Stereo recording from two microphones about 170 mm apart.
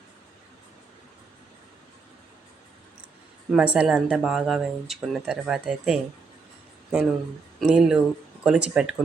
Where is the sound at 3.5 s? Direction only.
5° right (ahead or behind).